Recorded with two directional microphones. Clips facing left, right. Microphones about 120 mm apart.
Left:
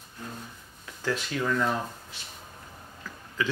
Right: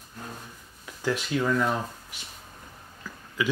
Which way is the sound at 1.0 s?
10° right (ahead or behind).